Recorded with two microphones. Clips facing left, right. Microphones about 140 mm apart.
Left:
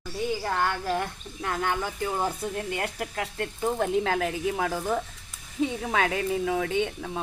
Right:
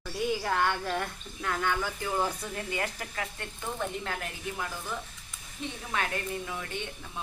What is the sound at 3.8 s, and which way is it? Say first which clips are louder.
Speech: left 9 dB; 90° left.